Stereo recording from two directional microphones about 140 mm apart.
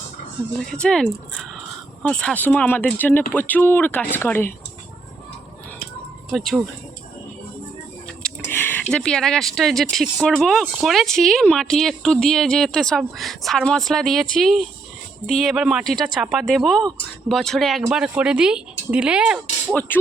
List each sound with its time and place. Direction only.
0.7 s speech: 5° left (ahead or behind)
2.0 s speech: 10° left (ahead or behind)
6.3 s speech: centre (ahead or behind)
8.4 s speech: 15° left (ahead or behind); by 19.4 s 5° right (ahead or behind)
19.9 s speech: 15° left (ahead or behind)